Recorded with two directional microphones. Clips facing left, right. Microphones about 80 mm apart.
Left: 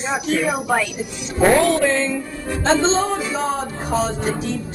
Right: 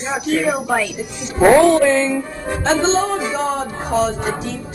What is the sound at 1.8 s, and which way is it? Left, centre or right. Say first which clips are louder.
Speech: right 4 dB; centre.